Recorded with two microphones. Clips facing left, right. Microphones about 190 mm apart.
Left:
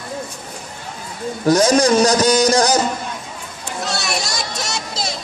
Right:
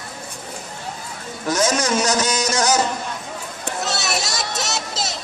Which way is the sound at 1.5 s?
35° left (ahead or behind).